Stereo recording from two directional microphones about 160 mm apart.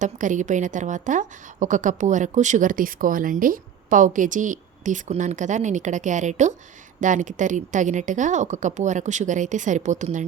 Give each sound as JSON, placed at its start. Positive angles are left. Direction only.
{"t": 0.0, "sound": "a woman's voice", "side_deg": -50}